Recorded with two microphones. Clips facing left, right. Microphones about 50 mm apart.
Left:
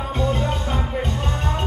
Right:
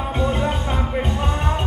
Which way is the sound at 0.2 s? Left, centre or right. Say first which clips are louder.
Right 1 dB; centre.